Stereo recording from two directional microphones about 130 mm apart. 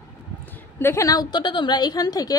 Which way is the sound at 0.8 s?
20° left (ahead or behind).